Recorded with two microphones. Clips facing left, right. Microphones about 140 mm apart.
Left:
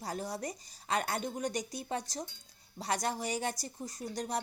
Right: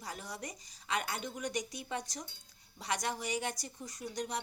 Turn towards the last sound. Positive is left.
turn(degrees=35)  # may be behind; listen again after turning